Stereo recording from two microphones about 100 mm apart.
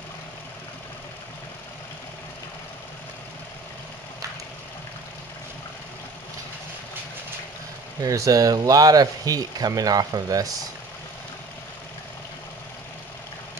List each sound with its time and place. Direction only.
8.0 s speech: 35° right (ahead or behind)